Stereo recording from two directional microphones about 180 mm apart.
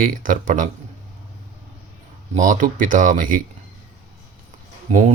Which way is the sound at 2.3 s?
45° right (ahead or behind).